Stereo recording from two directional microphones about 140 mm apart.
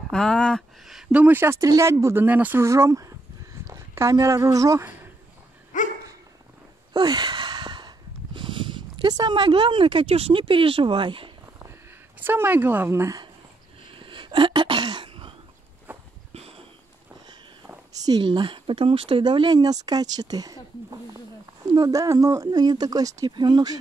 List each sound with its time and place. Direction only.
0.1 s speech: 5° left (ahead or behind); by 4.8 s 25° right (ahead or behind)
5.7 s dog: 65° left (ahead or behind)
6.9 s a sound: 30° right (ahead or behind)
8.4 s speech: 35° right (ahead or behind)
12.2 s speech: 15° right (ahead or behind)
13.9 s sneeze: 35° right (ahead or behind)
15.9 s walk: 15° right (ahead or behind)
17.9 s speech: 30° right (ahead or behind)
21.7 s speech: 25° right (ahead or behind)